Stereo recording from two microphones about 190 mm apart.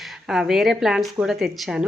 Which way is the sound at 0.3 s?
Centre (ahead or behind).